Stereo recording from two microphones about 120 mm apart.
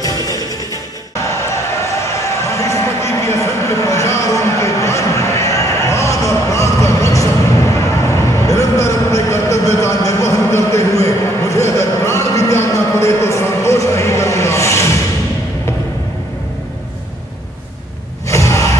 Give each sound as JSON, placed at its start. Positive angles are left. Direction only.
{"t": 0.0, "sound": "music", "side_deg": 30}
{"t": 2.5, "sound": "a sound", "side_deg": 25}
{"t": 18.3, "sound": "gasp", "side_deg": 25}